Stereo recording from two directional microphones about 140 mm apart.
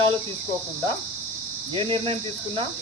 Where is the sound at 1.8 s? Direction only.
35° right (ahead or behind).